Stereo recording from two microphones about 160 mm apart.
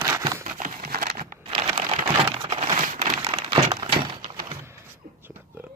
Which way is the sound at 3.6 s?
35° right (ahead or behind).